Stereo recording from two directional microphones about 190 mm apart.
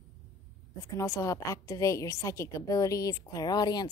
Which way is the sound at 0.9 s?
15° left (ahead or behind).